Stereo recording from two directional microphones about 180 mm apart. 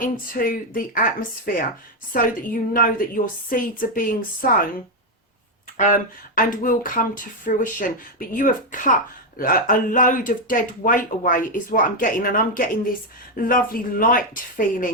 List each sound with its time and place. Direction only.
0.0 s speech: 50° left (ahead or behind)
2.1 s speech: 50° left (ahead or behind)
5.7 s speech: 45° left (ahead or behind)